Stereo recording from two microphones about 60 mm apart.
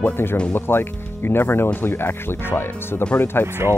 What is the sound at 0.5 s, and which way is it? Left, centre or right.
Speech, left.